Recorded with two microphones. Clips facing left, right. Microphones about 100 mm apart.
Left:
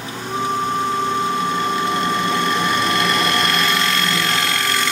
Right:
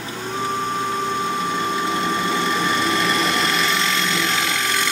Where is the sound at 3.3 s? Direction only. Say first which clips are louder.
Left 2 dB; centre (ahead or behind).